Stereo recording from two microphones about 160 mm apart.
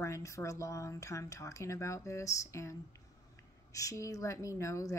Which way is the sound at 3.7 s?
20° left (ahead or behind).